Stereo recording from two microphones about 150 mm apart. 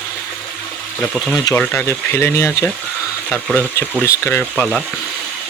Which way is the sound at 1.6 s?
15° left (ahead or behind).